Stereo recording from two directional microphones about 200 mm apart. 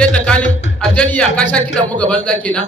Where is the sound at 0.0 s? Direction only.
5° left (ahead or behind).